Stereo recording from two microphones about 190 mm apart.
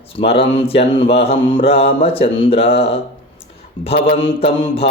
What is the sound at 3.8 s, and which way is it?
Speech, 25° left (ahead or behind).